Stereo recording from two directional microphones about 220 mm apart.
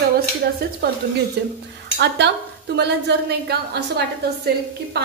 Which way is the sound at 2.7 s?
50° right (ahead or behind).